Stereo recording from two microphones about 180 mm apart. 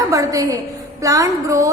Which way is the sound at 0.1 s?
20° right (ahead or behind).